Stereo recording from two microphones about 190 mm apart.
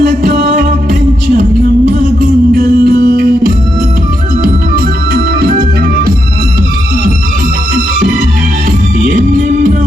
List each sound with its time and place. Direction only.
0.0 s music: 45° right (ahead or behind)
4.7 s organ: 50° right (ahead or behind)